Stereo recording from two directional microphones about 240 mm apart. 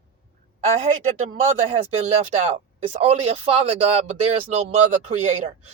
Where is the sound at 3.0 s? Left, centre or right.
Right.